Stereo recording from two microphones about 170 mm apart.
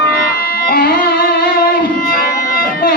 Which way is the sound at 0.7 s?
60° left (ahead or behind).